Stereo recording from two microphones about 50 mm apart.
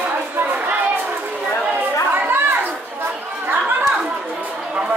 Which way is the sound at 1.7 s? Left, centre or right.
Right.